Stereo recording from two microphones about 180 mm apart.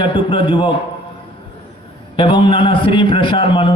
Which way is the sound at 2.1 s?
30° left (ahead or behind).